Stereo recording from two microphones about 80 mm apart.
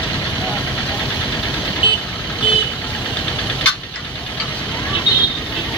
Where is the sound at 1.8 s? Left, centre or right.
Left.